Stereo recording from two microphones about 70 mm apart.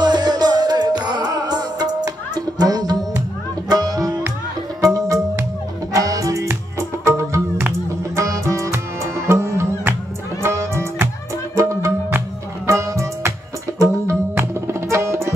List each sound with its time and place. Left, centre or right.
0.0 s music: right
4.8 s music: right
14.3 s tabla: right